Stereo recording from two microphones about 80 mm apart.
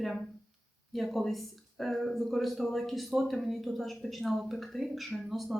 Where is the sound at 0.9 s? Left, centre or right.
Centre.